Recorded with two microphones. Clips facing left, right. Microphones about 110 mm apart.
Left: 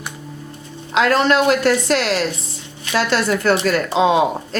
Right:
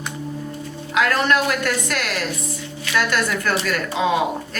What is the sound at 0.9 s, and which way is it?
A woman's voice, 25° left (ahead or behind).